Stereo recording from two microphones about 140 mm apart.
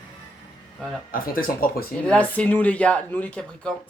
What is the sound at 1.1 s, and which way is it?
Speech, 90° left.